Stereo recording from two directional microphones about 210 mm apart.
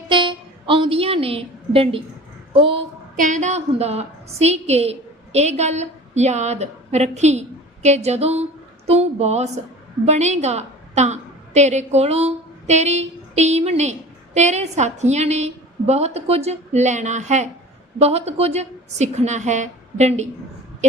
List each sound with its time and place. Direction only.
0.1 s a sound: 25° right (ahead or behind)
2.5 s a woman's voice: 25° right (ahead or behind)
3.2 s a woman's voice: 35° right (ahead or behind)